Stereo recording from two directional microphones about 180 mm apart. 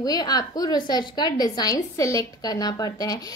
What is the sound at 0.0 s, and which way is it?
A woman's voice, 20° left (ahead or behind).